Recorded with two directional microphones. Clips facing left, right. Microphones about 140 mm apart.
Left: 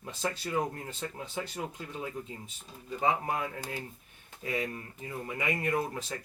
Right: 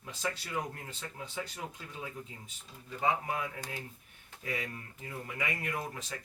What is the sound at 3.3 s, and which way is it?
Speech, 40° left (ahead or behind).